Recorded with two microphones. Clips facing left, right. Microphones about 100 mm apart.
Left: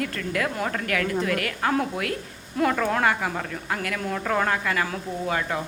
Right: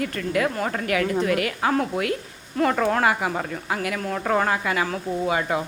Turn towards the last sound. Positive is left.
turn(degrees=-15)  # may be behind; listen again after turning